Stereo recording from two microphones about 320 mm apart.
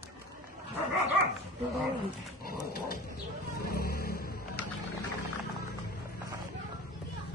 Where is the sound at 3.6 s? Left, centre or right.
Left.